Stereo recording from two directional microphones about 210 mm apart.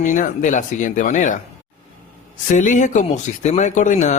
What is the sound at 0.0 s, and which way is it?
Speech, 35° left (ahead or behind).